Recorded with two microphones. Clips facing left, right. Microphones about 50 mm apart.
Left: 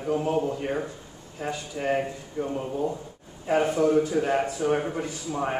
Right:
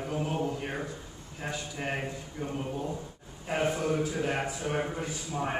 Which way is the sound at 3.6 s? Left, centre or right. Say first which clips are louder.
Left 6 dB; left.